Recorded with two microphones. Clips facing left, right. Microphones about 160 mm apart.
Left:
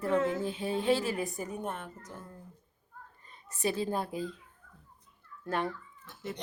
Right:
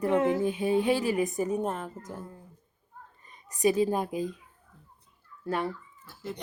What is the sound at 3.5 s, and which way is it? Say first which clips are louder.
Speech: right 7 dB; 15° right (ahead or behind).